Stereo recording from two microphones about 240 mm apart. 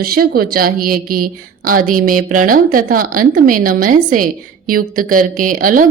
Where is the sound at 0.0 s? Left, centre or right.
Right.